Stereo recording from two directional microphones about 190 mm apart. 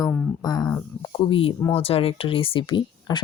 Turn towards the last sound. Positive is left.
turn(degrees=25)  # may be behind; listen again after turning